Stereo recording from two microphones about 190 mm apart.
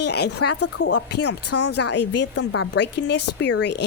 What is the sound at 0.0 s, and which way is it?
Speech, 60° left (ahead or behind).